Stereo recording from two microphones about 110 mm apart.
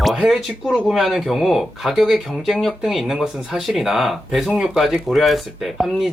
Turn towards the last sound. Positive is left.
turn(degrees=0)  # may be behind; listen again after turning